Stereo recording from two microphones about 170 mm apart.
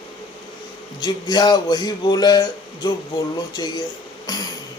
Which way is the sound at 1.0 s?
25° left (ahead or behind).